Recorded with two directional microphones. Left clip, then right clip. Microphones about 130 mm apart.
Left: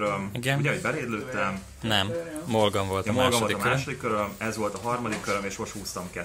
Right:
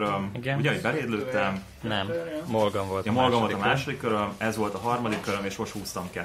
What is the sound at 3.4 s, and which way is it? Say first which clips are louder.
Speech: even; 55° right (ahead or behind).